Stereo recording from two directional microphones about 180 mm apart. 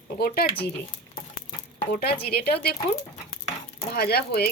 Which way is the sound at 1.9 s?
65° left (ahead or behind).